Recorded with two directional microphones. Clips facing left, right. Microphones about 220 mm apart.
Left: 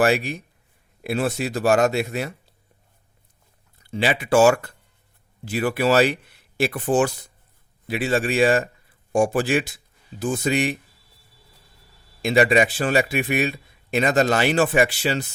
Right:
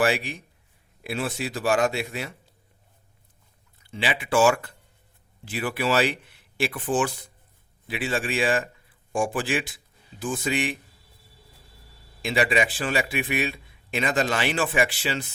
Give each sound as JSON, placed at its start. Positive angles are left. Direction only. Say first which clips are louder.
{"t": 0.0, "sound": "a man's voice", "louder": "left 4 dB", "side_deg": 45}
{"t": 3.8, "sound": "speech", "louder": "left 6 dB", "side_deg": 40}
{"t": 12.2, "sound": "a man's voice", "louder": "left 6 dB", "side_deg": 45}